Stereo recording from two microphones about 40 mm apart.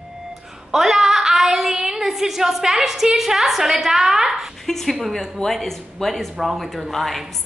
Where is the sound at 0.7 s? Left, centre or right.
Centre.